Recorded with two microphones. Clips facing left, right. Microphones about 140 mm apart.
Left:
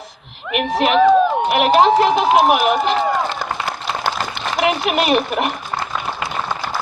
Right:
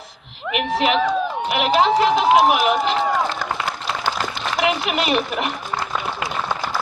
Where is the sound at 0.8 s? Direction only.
55° left (ahead or behind).